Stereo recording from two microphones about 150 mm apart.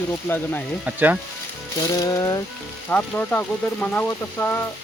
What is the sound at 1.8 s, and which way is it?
Music, 25° left (ahead or behind).